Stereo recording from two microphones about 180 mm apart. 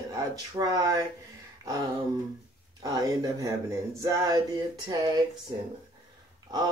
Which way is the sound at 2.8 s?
20° right (ahead or behind).